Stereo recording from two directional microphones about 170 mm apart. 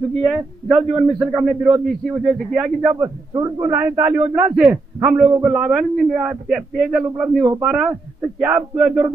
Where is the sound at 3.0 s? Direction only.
20° right (ahead or behind).